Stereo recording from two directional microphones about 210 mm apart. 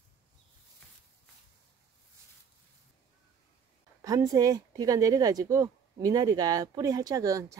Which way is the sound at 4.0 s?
15° right (ahead or behind).